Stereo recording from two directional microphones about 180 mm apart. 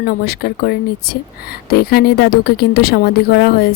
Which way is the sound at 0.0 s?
55° left (ahead or behind).